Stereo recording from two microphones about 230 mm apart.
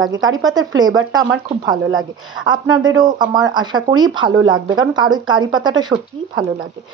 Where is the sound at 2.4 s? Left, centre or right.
Centre.